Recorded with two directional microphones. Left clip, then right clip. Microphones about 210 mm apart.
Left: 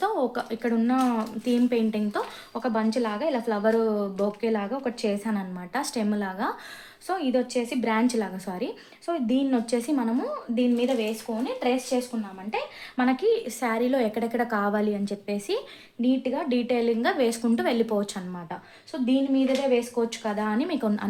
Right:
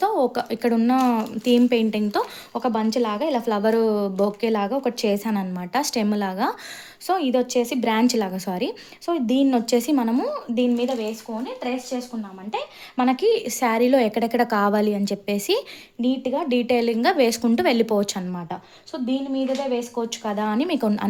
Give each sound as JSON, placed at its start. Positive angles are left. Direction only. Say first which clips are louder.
{"t": 0.0, "sound": "speech", "louder": "right 5 dB", "side_deg": -40}
{"t": 11.3, "sound": "speech", "louder": "left 2 dB", "side_deg": -20}
{"t": 13.0, "sound": "a woman's voice", "louder": "right 4 dB", "side_deg": -45}
{"t": 18.9, "sound": "a woman's voice", "louder": "left 1 dB", "side_deg": -30}